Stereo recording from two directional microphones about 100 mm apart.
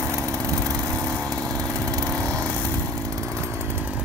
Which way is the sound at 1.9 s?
30° right (ahead or behind).